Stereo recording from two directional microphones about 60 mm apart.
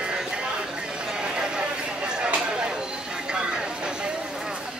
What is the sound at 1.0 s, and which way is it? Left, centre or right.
Chatter, centre.